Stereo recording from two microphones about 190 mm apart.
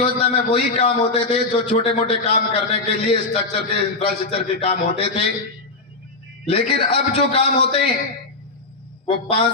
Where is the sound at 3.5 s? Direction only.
30° left (ahead or behind).